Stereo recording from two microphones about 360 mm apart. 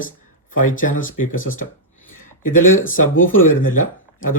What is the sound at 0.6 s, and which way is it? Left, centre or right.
Speech, left.